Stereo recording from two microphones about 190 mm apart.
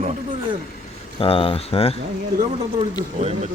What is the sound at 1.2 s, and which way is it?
Speech, 30° left (ahead or behind).